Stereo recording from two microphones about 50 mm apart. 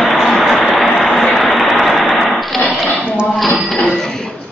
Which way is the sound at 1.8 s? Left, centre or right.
Centre.